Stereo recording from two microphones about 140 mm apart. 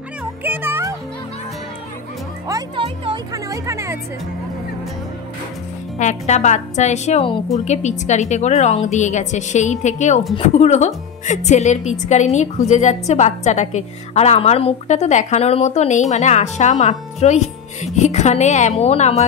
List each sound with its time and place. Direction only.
0.4 s music: 15° right (ahead or behind)
2.7 s music: 40° right (ahead or behind)
3.4 s speech: 20° right (ahead or behind)
5.9 s a woman's voice: 55° left (ahead or behind)